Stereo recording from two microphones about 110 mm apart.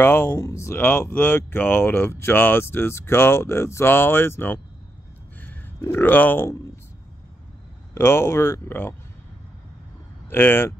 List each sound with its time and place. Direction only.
0.0 s speech: 20° left (ahead or behind)
5.8 s speech: 20° left (ahead or behind)
7.9 s speech: 20° left (ahead or behind)
10.3 s speech: 20° left (ahead or behind)